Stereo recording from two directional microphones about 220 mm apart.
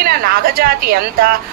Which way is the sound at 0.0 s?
45° right (ahead or behind).